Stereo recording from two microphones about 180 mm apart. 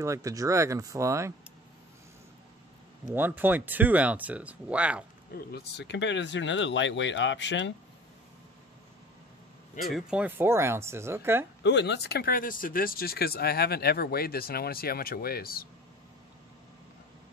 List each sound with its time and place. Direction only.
0.0 s speech: 15° right (ahead or behind)
3.2 s speech: 10° right (ahead or behind)
5.3 s speech: 65° left (ahead or behind); by 7.7 s 85° left
9.8 s speech: 5° right (ahead or behind)
11.6 s speech: 75° left (ahead or behind); by 15.7 s 55° left (ahead or behind)